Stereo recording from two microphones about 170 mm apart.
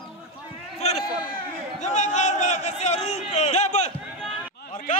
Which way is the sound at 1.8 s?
45° left (ahead or behind).